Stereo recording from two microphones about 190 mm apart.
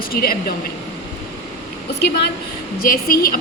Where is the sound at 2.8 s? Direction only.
50° left (ahead or behind).